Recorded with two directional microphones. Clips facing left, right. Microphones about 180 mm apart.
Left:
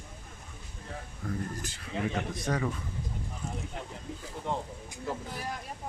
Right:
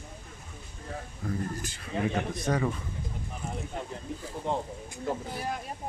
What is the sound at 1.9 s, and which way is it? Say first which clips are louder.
Speech: right 3 dB; 50° right (ahead or behind).